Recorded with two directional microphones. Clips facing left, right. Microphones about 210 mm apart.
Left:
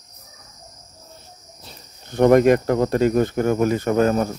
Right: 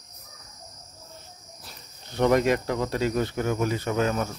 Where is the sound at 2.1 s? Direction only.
50° left (ahead or behind).